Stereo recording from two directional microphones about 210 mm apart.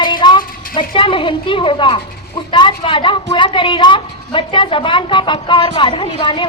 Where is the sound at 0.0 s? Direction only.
20° left (ahead or behind).